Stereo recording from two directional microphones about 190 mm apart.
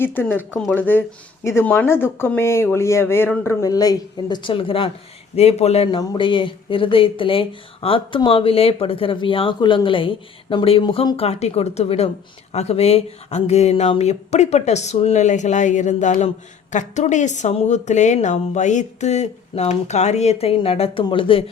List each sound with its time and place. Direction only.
0.0 s speech: 10° left (ahead or behind); by 21.4 s 25° left (ahead or behind)